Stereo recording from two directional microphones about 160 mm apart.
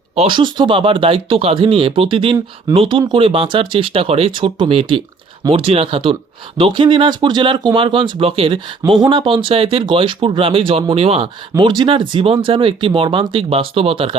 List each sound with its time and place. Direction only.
0.2 s speech: 30° right (ahead or behind)